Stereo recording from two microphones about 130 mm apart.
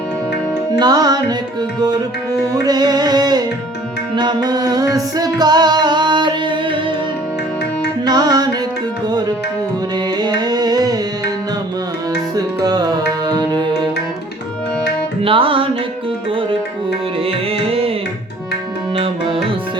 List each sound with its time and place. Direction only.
0.8 s music: 30° right (ahead or behind)
2.6 s music: 30° right (ahead or behind)
8.0 s music: 30° right (ahead or behind)
10.2 s carnatic music: 30° right (ahead or behind)
12.6 s music: 30° right (ahead or behind)
15.2 s music: 45° right (ahead or behind)
17.2 s music: 45° right (ahead or behind)
18.9 s music: 45° right (ahead or behind)